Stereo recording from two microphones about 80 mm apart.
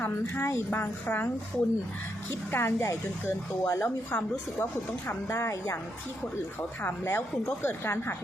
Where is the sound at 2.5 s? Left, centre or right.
Left.